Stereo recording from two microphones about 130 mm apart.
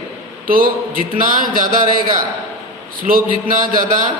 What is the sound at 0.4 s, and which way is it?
Speech, 90° right.